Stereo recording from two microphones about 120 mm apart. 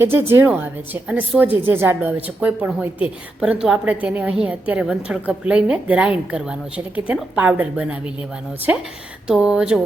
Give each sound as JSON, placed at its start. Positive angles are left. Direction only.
{"t": 0.0, "sound": "a woman's voice", "side_deg": -20}